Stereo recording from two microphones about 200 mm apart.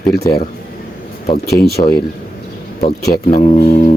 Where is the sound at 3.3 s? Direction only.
35° left (ahead or behind).